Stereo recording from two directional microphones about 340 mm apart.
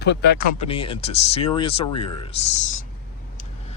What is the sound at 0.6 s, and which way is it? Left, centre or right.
Speech, centre.